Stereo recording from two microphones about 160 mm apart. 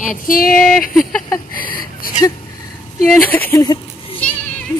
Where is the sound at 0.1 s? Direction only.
65° left (ahead or behind).